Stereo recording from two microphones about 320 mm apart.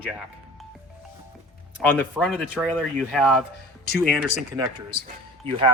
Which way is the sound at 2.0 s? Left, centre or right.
Centre.